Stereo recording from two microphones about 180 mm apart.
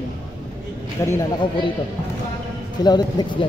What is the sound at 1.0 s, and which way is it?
Speech, 15° left (ahead or behind).